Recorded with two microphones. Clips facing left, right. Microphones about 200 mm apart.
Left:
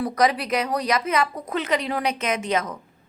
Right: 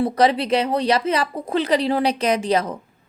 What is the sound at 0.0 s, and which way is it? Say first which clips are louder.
A woman's voice: right 4 dB; 30° right (ahead or behind).